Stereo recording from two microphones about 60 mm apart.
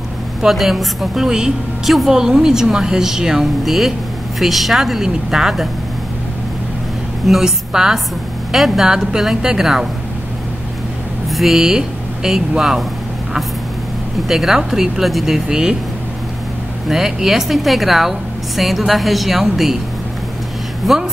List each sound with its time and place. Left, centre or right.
0.4 s a woman's voice: centre
7.2 s a woman's voice: centre
11.2 s speech: centre
14.2 s speech: centre
16.8 s speech: centre
20.8 s speech: centre